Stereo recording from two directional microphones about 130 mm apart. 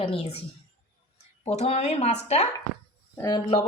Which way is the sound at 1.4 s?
55° left (ahead or behind).